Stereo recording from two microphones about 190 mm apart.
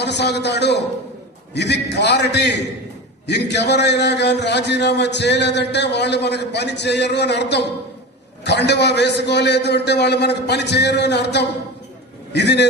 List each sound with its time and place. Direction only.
0.0 s a man's voice: 65° left (ahead or behind)